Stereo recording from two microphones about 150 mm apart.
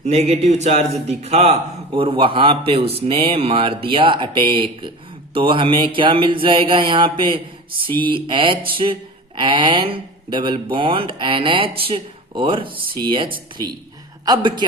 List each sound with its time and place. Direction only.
0.0 s a man's voice: 45° right (ahead or behind)
1.9 s a man's voice: 35° right (ahead or behind)